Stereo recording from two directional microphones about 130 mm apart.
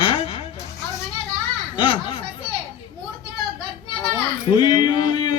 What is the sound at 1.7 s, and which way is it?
Speech, 40° left (ahead or behind).